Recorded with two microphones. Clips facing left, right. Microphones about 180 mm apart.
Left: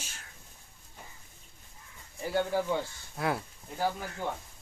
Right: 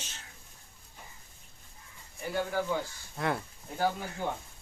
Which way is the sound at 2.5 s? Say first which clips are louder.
Even; 30° left (ahead or behind).